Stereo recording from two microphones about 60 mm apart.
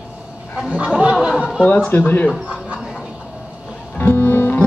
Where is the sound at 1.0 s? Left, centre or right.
Centre.